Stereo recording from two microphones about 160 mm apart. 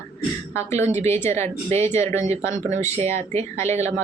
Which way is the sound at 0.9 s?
45° right (ahead or behind).